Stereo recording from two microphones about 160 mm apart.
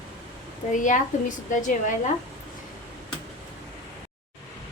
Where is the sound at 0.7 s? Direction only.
50° left (ahead or behind).